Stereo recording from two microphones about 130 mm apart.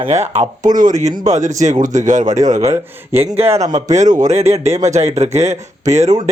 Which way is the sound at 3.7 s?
65° right (ahead or behind).